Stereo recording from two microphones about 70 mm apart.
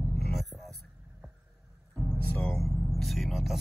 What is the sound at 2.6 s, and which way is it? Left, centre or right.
Vehicle, centre.